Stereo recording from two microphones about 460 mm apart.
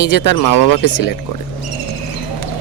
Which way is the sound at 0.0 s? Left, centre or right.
Left.